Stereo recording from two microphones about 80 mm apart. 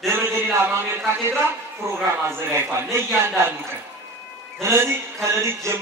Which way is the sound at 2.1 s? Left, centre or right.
Right.